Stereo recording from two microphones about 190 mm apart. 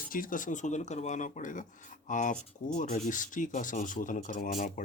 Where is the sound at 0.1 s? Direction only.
45° left (ahead or behind).